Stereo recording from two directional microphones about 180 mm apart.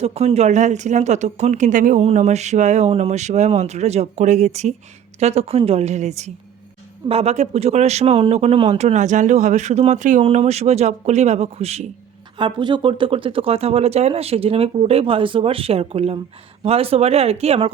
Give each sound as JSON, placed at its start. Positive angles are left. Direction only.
{"t": 0.0, "sound": "speech", "side_deg": -35}